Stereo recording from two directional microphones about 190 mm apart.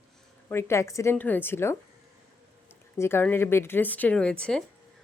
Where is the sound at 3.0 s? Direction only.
10° left (ahead or behind).